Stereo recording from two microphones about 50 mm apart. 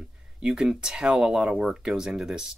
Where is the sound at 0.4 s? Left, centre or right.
Centre.